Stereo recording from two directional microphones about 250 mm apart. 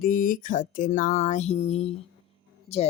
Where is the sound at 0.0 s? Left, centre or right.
Left.